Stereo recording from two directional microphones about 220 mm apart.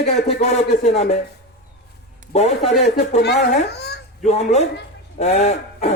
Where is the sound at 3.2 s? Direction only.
50° left (ahead or behind).